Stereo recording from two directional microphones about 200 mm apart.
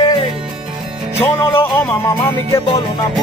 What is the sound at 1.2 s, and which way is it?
Speech, 10° left (ahead or behind).